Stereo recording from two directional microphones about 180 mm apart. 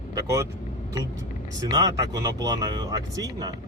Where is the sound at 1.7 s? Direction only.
20° right (ahead or behind).